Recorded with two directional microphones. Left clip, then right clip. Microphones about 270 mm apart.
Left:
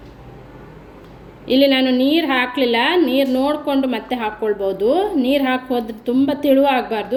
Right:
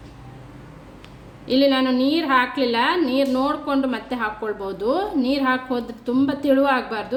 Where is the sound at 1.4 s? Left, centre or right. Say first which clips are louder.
Left 4 dB; centre.